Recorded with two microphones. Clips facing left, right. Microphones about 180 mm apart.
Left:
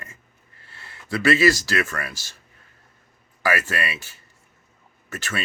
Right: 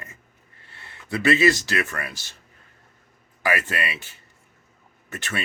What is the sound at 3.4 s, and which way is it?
A man's voice, 20° right (ahead or behind).